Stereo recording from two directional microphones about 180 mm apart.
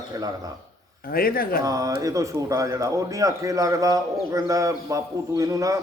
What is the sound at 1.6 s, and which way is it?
Speech, 20° right (ahead or behind).